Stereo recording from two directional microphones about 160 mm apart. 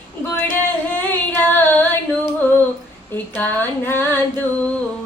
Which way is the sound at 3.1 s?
10° left (ahead or behind).